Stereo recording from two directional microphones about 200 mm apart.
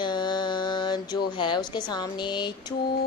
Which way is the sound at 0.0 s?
20° left (ahead or behind).